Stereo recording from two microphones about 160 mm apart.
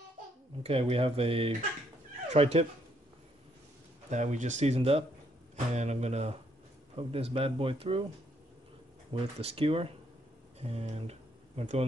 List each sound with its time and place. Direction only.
0.6 s speech: 35° right (ahead or behind)
4.1 s speech: 50° right (ahead or behind)
9.1 s speech: 40° right (ahead or behind)